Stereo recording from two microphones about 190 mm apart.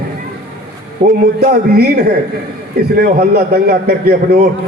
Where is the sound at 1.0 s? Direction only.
55° right (ahead or behind).